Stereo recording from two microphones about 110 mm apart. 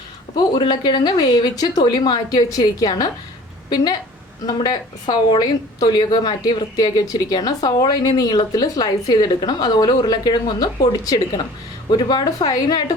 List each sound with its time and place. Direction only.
0.3 s a woman's voice: 40° left (ahead or behind)
4.4 s a woman's voice: 40° left (ahead or behind)